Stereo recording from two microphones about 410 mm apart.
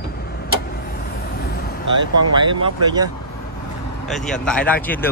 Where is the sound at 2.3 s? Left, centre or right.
Centre.